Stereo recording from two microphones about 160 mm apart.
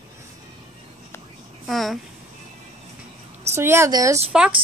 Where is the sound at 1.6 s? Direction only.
Centre (ahead or behind).